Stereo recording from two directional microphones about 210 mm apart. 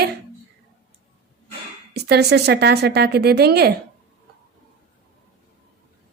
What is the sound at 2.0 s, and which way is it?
A woman's voice, 50° right (ahead or behind).